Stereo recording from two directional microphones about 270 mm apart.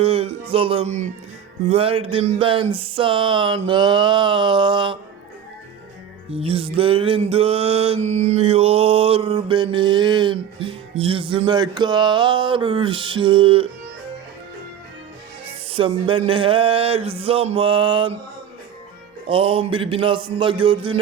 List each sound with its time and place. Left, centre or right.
0.0 s music: right
2.7 s a sound: centre
6.3 s music: right
15.7 s music: centre
19.3 s music: centre